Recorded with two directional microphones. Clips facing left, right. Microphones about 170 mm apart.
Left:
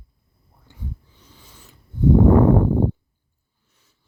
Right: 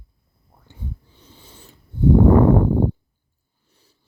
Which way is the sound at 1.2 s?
30° right (ahead or behind).